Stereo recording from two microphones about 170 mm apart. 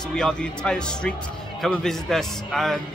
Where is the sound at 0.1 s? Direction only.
5° left (ahead or behind).